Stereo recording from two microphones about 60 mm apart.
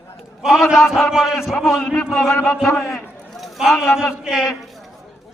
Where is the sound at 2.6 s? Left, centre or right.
Centre.